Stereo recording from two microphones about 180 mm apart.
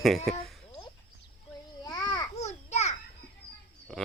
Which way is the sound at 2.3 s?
40° left (ahead or behind).